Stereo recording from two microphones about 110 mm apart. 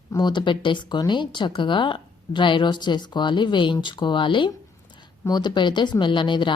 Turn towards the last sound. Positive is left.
turn(degrees=45)  # may be behind; listen again after turning